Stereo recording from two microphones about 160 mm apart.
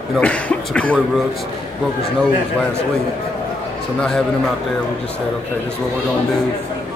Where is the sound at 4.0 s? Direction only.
5° left (ahead or behind).